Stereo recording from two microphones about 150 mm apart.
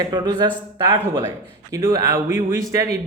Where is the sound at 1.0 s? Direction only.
15° right (ahead or behind).